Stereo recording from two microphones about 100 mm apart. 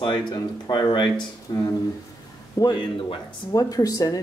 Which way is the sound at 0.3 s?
45° left (ahead or behind).